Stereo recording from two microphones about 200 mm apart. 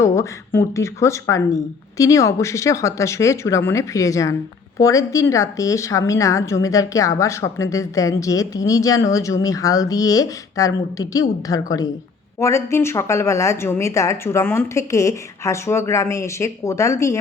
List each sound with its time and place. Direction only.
0.0 s a woman's voice: 15° left (ahead or behind)